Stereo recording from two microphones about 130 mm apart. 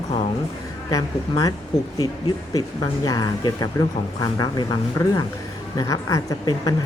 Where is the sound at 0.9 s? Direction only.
25° left (ahead or behind).